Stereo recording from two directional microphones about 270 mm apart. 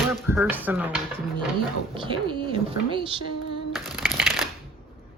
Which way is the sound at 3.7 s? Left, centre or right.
Centre.